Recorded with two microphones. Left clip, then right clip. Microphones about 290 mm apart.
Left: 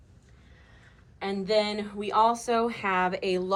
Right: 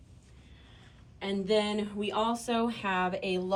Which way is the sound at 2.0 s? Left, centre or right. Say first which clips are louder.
Left 9 dB; left.